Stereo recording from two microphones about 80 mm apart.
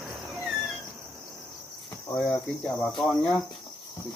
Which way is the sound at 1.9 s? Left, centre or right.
Left.